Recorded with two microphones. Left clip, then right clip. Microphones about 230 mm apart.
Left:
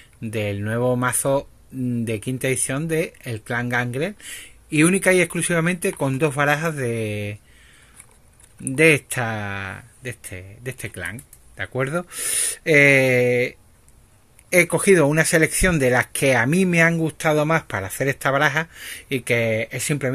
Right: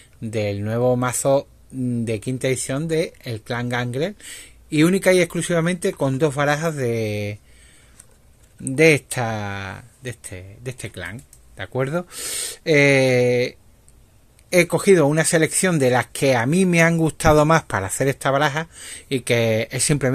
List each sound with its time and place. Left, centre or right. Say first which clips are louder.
0.2 s speech: right 2 dB; centre
8.6 s speech: right 1 dB; centre